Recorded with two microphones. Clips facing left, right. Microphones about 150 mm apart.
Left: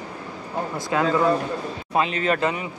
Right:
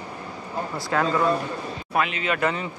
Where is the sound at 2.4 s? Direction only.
20° left (ahead or behind).